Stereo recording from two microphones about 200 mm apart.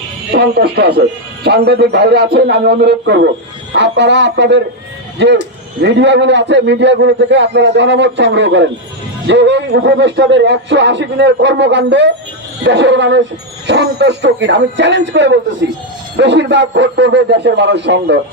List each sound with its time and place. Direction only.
0.3 s speech: 55° right (ahead or behind)